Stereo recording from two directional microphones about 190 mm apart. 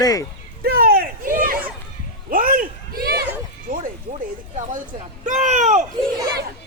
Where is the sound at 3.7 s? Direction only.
45° right (ahead or behind).